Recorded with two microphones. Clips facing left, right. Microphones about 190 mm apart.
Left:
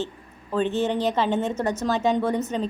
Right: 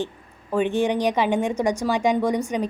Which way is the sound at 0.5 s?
15° right (ahead or behind).